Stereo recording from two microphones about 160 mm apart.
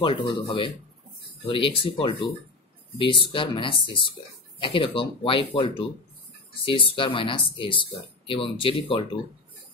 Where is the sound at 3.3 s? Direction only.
35° left (ahead or behind).